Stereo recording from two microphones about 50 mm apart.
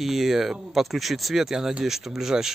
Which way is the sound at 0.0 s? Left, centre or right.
Centre.